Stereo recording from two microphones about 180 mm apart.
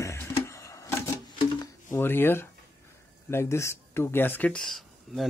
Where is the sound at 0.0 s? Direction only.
15° left (ahead or behind).